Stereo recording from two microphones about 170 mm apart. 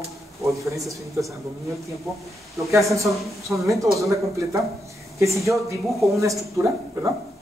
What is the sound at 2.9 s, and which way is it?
Speech, 20° right (ahead or behind).